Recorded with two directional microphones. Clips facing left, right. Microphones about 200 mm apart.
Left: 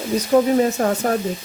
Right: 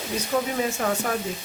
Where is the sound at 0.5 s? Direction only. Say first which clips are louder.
Left 8 dB; 40° left (ahead or behind).